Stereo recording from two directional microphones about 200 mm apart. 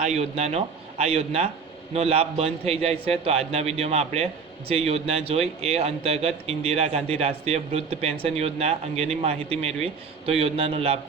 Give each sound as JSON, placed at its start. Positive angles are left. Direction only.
{"t": 0.0, "sound": "speech", "side_deg": -35}